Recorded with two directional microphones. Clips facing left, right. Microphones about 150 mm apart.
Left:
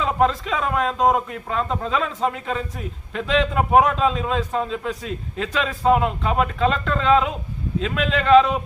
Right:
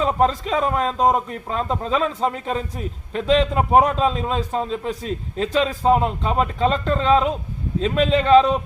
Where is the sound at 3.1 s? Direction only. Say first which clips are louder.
Right 3 dB; 35° right (ahead or behind).